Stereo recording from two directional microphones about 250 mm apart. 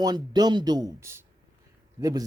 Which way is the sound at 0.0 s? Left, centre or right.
Centre.